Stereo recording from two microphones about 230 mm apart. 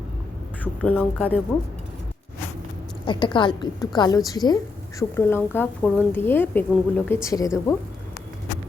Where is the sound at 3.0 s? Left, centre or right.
Left.